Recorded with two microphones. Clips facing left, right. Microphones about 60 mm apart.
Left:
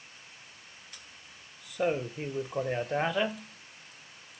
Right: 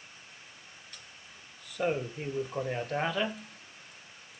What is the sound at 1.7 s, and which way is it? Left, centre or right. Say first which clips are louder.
Speech: left 1 dB; centre.